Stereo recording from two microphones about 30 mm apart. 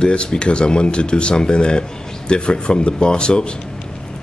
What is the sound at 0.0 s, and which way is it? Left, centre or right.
Speech, left.